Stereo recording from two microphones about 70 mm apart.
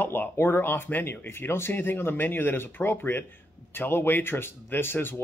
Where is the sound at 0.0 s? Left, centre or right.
Left.